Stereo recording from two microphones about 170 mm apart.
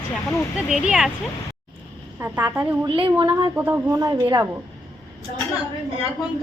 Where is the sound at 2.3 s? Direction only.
10° right (ahead or behind).